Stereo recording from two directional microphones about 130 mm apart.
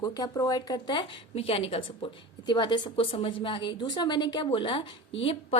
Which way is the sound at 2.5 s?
35° left (ahead or behind).